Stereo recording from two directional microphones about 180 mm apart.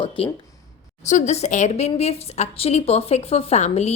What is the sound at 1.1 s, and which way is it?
A woman's voice, 40° left (ahead or behind).